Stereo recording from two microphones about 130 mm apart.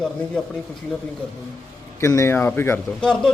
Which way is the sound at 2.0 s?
20° left (ahead or behind).